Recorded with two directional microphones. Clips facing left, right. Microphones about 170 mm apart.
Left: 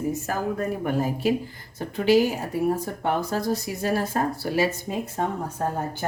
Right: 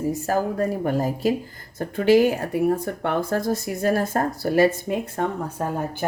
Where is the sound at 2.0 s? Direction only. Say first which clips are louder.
Right 3 dB; 60° right (ahead or behind).